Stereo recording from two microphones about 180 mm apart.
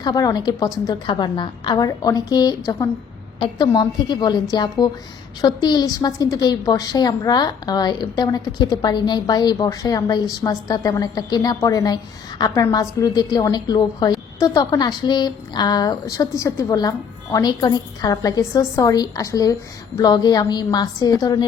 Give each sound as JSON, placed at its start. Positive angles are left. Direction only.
{"t": 0.0, "sound": "a woman's voice", "side_deg": 20}